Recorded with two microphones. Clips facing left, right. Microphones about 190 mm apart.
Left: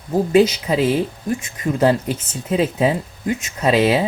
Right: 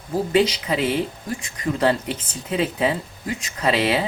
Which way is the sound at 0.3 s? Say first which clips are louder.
Left 5 dB; 25° left (ahead or behind).